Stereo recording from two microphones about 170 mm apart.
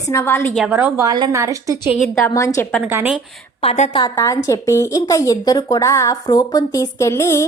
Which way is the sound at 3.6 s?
35° left (ahead or behind).